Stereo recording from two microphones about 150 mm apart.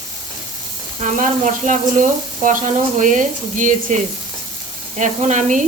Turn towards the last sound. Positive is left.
turn(degrees=-55)  # may be behind; listen again after turning